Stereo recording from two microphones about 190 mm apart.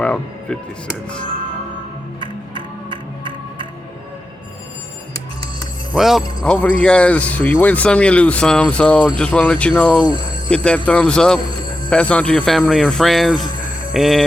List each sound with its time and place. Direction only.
0.0 s music: 5° left (ahead or behind)
2.2 s music: 25° right (ahead or behind)
5.9 s speech: centre (ahead or behind)